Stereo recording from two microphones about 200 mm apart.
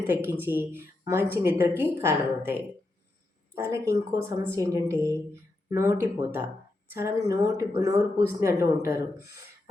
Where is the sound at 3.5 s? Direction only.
15° right (ahead or behind).